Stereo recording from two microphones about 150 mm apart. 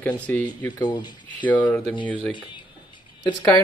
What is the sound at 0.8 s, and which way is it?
Speech, 30° left (ahead or behind).